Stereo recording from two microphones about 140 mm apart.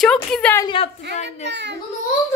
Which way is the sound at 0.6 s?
40° left (ahead or behind).